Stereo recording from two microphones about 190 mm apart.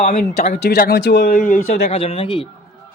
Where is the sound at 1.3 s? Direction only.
45° left (ahead or behind).